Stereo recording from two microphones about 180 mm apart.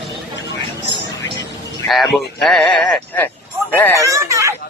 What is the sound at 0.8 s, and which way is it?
Music, 75° left (ahead or behind).